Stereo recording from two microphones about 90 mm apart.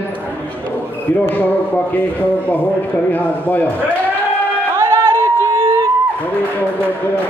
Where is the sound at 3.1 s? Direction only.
20° left (ahead or behind).